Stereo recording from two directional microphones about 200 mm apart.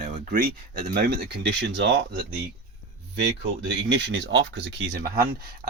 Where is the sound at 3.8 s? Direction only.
65° right (ahead or behind).